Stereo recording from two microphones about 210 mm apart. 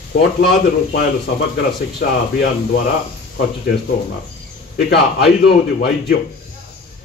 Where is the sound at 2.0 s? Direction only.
45° left (ahead or behind).